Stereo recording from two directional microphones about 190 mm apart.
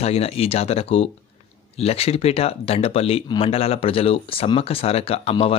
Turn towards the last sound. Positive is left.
turn(degrees=30)  # may be behind; listen again after turning